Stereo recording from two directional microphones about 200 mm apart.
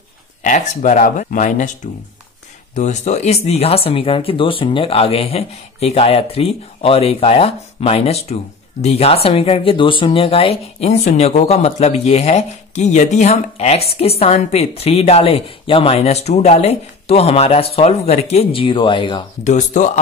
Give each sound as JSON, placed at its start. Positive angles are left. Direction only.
{"t": 0.4, "sound": "speech", "side_deg": 40}
{"t": 2.7, "sound": "speech", "side_deg": 35}
{"t": 19.4, "sound": "speech", "side_deg": 35}